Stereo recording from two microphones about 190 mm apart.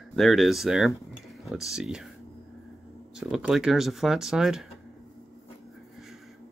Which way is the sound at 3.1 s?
5° right (ahead or behind).